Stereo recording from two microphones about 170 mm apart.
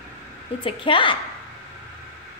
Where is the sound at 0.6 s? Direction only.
30° left (ahead or behind).